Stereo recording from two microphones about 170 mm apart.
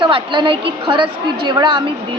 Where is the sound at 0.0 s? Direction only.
30° right (ahead or behind).